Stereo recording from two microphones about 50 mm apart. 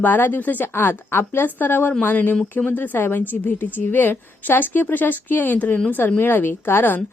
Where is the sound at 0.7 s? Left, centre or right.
Left.